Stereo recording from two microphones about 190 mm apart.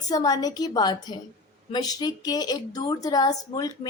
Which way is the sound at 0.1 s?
20° left (ahead or behind).